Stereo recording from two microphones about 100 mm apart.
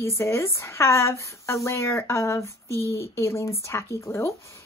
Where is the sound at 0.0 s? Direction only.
25° left (ahead or behind).